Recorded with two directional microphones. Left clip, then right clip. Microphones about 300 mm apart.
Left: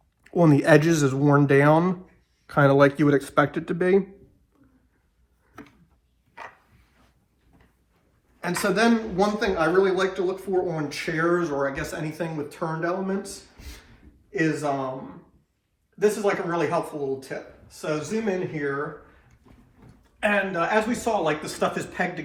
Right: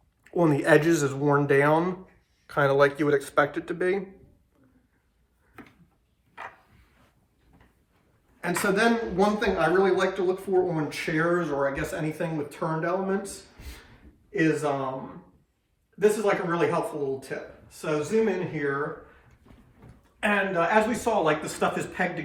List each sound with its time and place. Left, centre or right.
0.3 s speech: centre
8.4 s speech: centre
16.0 s speech: centre
20.1 s speech: centre